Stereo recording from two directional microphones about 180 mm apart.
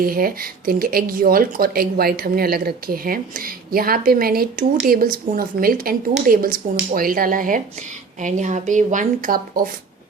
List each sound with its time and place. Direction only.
0.0 s a woman's voice: 55° right (ahead or behind)